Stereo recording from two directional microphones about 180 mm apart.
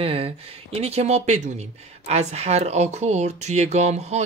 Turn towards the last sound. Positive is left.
turn(degrees=-40)  # may be behind; listen again after turning